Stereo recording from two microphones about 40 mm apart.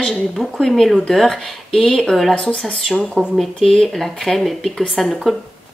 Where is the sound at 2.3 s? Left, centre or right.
Centre.